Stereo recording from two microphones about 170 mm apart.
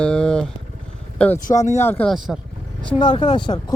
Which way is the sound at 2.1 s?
Centre (ahead or behind).